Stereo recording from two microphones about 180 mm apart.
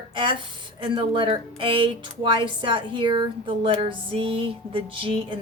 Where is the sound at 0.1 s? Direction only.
25° right (ahead or behind).